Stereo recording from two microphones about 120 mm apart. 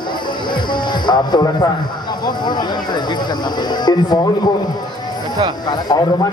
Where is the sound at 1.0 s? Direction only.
35° left (ahead or behind).